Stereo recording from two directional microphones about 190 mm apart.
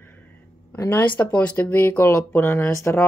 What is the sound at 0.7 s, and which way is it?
Speech, 10° left (ahead or behind).